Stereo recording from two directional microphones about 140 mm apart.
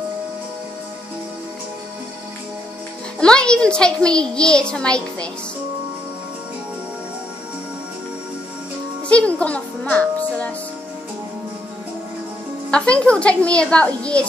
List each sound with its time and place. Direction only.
3.2 s a child's voice: 5° left (ahead or behind)
9.1 s a child's voice: 10° left (ahead or behind)
12.7 s a child's voice: 10° left (ahead or behind)